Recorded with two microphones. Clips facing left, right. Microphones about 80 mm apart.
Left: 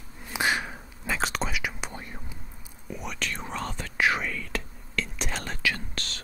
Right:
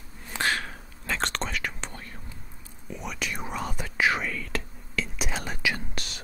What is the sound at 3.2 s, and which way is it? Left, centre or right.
Whispering, centre.